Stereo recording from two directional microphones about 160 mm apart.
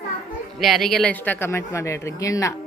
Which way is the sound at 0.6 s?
Centre (ahead or behind).